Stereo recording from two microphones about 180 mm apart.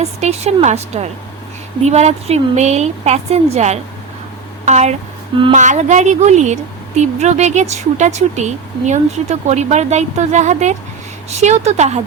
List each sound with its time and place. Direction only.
0.0 s a woman's voice: 35° right (ahead or behind)